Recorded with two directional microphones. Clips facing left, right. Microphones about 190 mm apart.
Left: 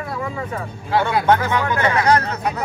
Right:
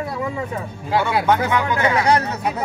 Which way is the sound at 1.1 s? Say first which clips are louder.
Left 1 dB; 15° right (ahead or behind).